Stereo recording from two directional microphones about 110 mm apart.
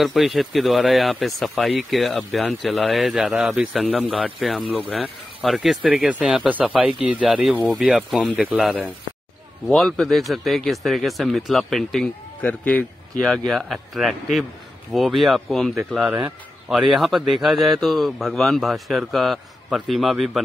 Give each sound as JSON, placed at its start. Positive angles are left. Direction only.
{"t": 0.0, "sound": "speech", "side_deg": 0}
{"t": 9.7, "sound": "speech", "side_deg": 5}
{"t": 12.4, "sound": "a man's voice", "side_deg": 15}
{"t": 13.2, "sound": "speech", "side_deg": 0}
{"t": 15.7, "sound": "speech", "side_deg": -15}